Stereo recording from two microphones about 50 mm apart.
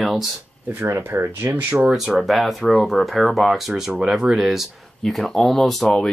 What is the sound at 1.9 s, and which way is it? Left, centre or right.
Speech, centre.